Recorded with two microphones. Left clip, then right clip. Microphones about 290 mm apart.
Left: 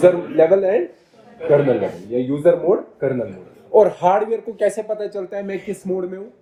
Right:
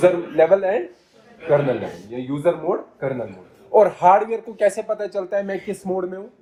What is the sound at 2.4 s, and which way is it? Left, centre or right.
Speech, right.